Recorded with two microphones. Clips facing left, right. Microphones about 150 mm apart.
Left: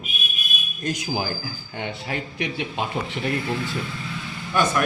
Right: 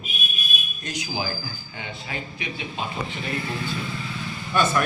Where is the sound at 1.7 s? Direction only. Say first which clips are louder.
Left 6 dB; 65° left (ahead or behind).